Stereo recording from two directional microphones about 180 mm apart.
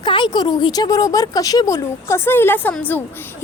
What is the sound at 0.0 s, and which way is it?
A woman's voice, 25° left (ahead or behind).